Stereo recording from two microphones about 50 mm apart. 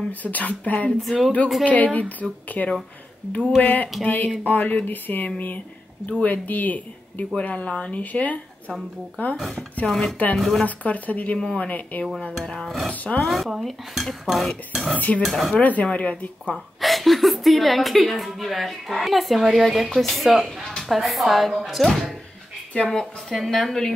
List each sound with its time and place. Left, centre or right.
0.2 s speech: left
3.6 s speech: left
6.0 s speech: left
7.3 s speech: left
9.8 s a woman's voice: centre
10.6 s speech: left
12.6 s a woman's voice: centre
15.0 s speech: left
15.2 s a woman's voice: centre
15.5 s speech: left
16.8 s a woman's voice: centre
20.4 s a woman's voice: centre